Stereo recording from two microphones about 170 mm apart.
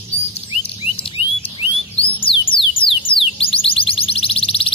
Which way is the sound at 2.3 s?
30° left (ahead or behind).